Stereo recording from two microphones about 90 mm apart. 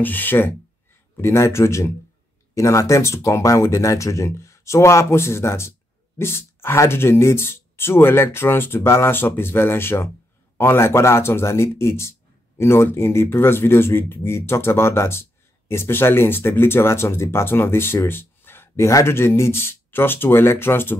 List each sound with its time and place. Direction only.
0.0 s speech: 20° left (ahead or behind)